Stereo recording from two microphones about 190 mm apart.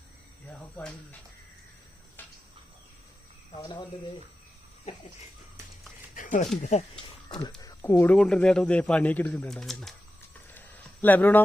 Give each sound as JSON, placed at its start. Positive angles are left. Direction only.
{"t": 3.6, "sound": "speech", "side_deg": 20}
{"t": 4.9, "sound": "speech", "side_deg": 35}
{"t": 6.1, "sound": "a sound", "side_deg": 45}
{"t": 6.6, "sound": "speech", "side_deg": 35}
{"t": 7.3, "sound": "speech", "side_deg": 25}
{"t": 10.5, "sound": "a sound", "side_deg": 10}